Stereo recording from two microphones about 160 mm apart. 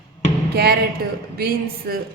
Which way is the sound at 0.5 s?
80° right.